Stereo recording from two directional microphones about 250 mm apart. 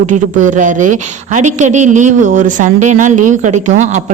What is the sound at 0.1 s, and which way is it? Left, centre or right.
Speech, right.